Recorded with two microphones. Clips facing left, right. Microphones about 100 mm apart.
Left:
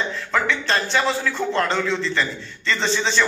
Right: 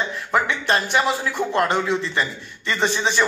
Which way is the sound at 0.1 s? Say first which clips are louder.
Right 1 dB; 15° right (ahead or behind).